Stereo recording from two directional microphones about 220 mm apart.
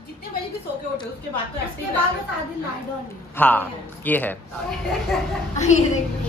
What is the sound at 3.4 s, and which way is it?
Speech, 10° left (ahead or behind).